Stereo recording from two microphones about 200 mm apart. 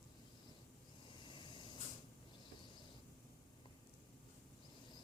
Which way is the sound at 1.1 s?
25° left (ahead or behind).